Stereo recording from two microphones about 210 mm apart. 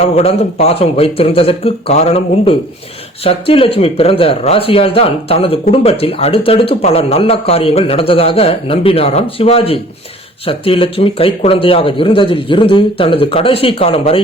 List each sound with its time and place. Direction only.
0.0 s speech: 30° left (ahead or behind)